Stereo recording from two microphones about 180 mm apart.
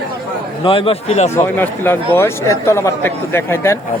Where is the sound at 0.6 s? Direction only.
30° left (ahead or behind).